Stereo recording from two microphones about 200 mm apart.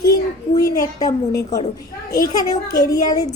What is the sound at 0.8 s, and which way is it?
Speech, 20° left (ahead or behind).